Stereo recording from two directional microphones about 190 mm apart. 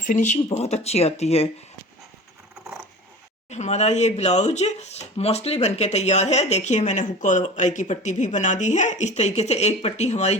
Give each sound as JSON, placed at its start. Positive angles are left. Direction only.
{"t": 0.0, "sound": "speech", "side_deg": 40}
{"t": 3.5, "sound": "speech", "side_deg": 35}